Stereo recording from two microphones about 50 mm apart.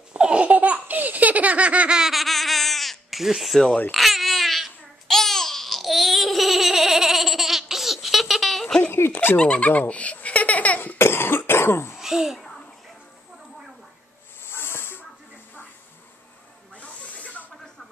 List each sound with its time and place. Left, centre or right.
0.1 s laughter: right
2.0 s a sound: centre
3.9 s babbling: centre
8.9 s fowl: left
9.4 s speech: left
10.2 s baby laughter: left
11.0 s cough: left
11.9 s babbling: centre
12.4 s a sound: centre
14.4 s snake: left
16.7 s snake: left